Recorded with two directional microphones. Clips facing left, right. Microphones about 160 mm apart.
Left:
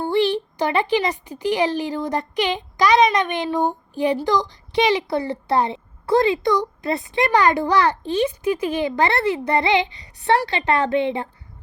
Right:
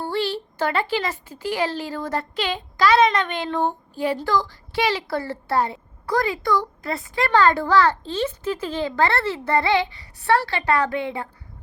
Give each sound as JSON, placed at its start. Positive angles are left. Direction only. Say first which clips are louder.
{"t": 0.0, "sound": "speech", "louder": "left 6 dB", "side_deg": 20}